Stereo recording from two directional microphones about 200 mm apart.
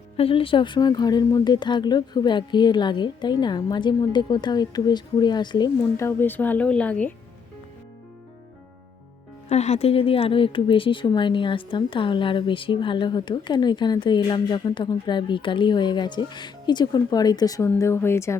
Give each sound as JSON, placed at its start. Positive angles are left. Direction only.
{"t": 0.2, "sound": "speech", "side_deg": 25}
{"t": 9.5, "sound": "speech", "side_deg": 35}